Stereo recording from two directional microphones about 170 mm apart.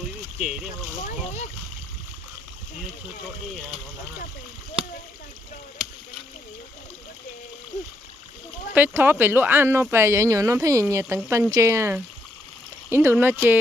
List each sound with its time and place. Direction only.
0.4 s speech: 5° right (ahead or behind)
1.0 s speech: 40° left (ahead or behind)
8.7 s speech: 10° right (ahead or behind)